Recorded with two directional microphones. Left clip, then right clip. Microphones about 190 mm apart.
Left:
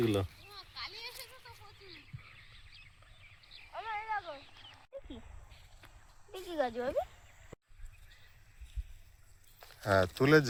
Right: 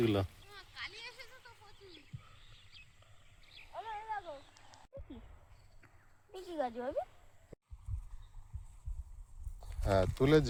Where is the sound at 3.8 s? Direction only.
25° right (ahead or behind).